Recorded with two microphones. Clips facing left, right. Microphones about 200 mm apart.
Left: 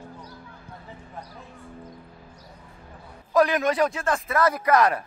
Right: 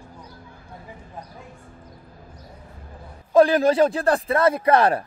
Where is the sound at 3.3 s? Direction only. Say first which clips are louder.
Right 5 dB; 30° right (ahead or behind).